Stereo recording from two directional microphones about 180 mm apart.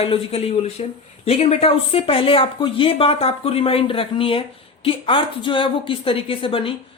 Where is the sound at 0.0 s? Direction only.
35° left (ahead or behind).